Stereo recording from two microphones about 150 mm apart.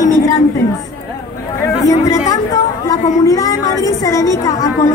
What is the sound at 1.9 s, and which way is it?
Speech, 20° left (ahead or behind).